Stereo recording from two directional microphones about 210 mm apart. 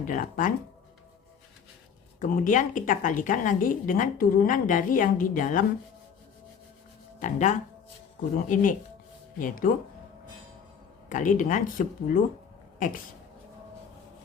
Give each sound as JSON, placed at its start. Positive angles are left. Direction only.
{"t": 0.0, "sound": "a woman's voice", "side_deg": 40}
{"t": 2.1, "sound": "a woman's voice", "side_deg": 40}
{"t": 7.2, "sound": "a woman's voice", "side_deg": 35}
{"t": 11.1, "sound": "a woman's voice", "side_deg": 40}